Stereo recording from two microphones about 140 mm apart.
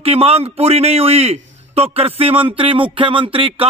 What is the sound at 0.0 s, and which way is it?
A man's voice, 45° right (ahead or behind).